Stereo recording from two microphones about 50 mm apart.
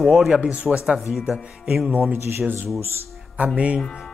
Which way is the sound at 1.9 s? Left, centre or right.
Right.